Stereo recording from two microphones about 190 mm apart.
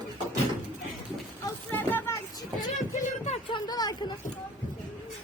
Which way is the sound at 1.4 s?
10° left (ahead or behind).